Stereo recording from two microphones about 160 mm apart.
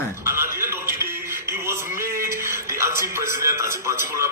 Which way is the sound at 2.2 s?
15° right (ahead or behind).